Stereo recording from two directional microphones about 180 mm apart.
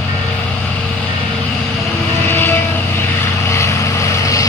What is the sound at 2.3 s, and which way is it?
Vehicle, 15° left (ahead or behind).